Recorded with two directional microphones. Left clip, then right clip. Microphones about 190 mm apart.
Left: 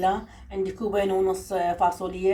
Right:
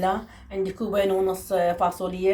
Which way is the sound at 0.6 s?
30° right (ahead or behind).